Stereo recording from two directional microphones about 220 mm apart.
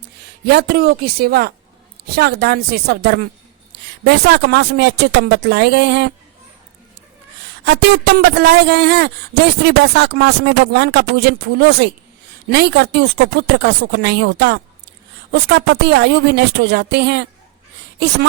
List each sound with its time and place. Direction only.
0.4 s speech: 45° right (ahead or behind)
7.6 s speech: 50° right (ahead or behind)